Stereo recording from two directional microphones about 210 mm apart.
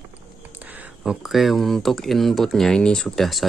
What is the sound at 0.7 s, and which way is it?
Speech, 5° right (ahead or behind).